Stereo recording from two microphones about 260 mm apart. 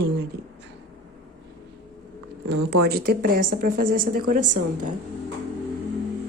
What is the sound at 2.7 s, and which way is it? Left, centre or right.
Speech, right.